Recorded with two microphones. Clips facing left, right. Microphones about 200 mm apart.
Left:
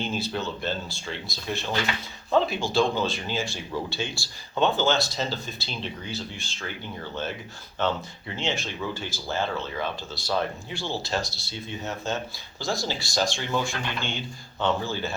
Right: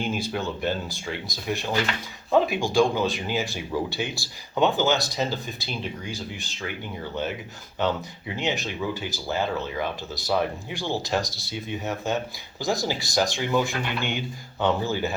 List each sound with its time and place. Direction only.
0.0 s speech: 15° right (ahead or behind)
8.4 s speech: 15° right (ahead or behind)